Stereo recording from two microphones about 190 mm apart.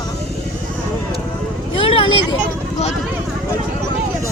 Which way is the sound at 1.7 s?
30° left (ahead or behind).